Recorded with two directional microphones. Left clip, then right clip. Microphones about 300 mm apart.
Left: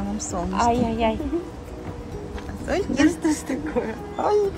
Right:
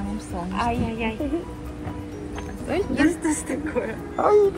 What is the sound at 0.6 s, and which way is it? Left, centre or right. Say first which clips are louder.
Speech: left 5 dB; left.